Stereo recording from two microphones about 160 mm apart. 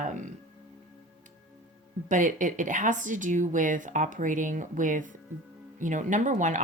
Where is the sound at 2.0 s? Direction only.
55° right (ahead or behind).